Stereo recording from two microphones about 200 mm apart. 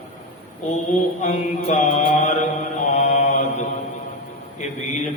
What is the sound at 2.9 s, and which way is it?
Mantra, 35° left (ahead or behind).